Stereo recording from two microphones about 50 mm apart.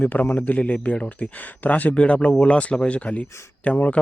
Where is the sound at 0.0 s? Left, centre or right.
Left.